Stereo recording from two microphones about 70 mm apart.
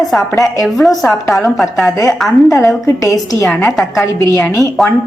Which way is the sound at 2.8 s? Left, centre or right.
Left.